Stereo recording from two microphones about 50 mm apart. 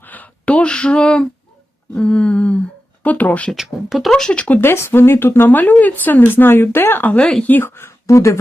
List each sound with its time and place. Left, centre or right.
0.0 s speech: left
2.0 s a sound: left
3.0 s a woman's voice: left
3.5 s speech: centre
4.3 s a sound: left
4.6 s speech: left
5.5 s a woman's voice: left
7.2 s a woman's voice: centre
7.4 s a woman's voice: left
7.7 s speech: left